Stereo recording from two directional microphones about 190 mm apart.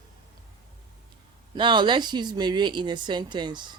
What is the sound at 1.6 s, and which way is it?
Speech, 25° right (ahead or behind).